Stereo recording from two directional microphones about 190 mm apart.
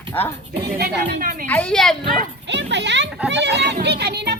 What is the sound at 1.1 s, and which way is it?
Speech, 45° right (ahead or behind).